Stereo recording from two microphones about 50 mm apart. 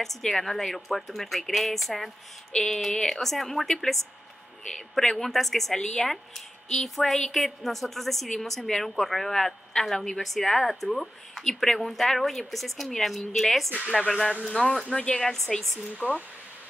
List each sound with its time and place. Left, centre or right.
0.0 s speech: centre
14.9 s speech: centre
15.2 s speech: centre
16.0 s speech: right